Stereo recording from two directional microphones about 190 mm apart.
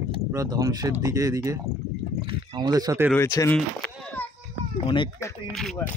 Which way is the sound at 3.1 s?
15° left (ahead or behind).